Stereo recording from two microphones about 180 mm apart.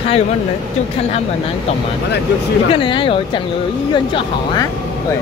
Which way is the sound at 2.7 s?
25° left (ahead or behind).